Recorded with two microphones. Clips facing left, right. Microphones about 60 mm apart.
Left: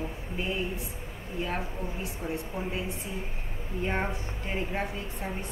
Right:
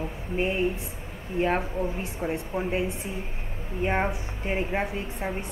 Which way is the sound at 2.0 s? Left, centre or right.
Right.